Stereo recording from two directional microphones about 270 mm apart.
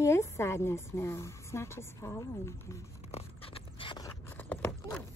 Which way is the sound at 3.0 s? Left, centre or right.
Left.